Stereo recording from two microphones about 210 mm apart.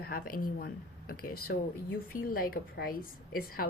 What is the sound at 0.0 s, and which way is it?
A woman's voice, 45° left (ahead or behind).